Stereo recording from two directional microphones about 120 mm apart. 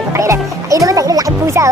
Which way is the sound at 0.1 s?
25° right (ahead or behind).